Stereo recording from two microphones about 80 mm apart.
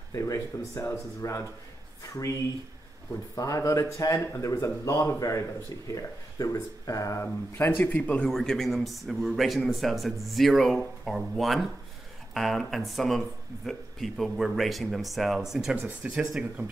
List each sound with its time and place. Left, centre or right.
0.1 s speech: left
3.3 s speech: left
7.5 s speech: left
8.3 s speech: centre